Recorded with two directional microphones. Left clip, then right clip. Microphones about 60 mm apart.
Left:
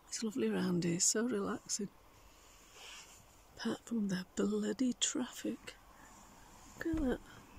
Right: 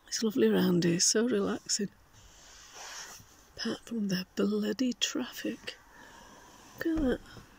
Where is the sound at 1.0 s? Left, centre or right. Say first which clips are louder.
Right 7 dB; right.